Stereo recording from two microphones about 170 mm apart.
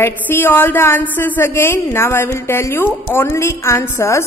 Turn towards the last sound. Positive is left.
turn(degrees=15)  # may be behind; listen again after turning